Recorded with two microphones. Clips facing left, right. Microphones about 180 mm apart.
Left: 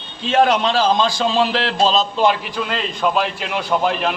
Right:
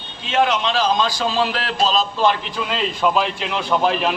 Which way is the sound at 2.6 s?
Centre (ahead or behind).